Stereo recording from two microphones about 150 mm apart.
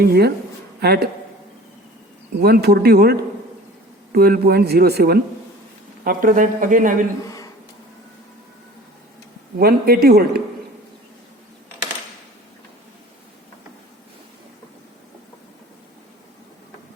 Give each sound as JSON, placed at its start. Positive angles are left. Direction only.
{"t": 0.0, "sound": "speech", "side_deg": -90}
{"t": 2.4, "sound": "speech", "side_deg": -90}
{"t": 6.1, "sound": "speech", "side_deg": -65}
{"t": 7.3, "sound": "a sound", "side_deg": 25}
{"t": 9.6, "sound": "speech", "side_deg": -90}